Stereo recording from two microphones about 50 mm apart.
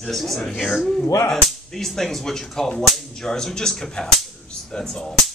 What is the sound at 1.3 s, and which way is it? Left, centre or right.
Speech, centre.